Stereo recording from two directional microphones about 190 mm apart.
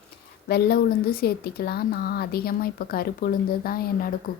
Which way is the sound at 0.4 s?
55° left (ahead or behind).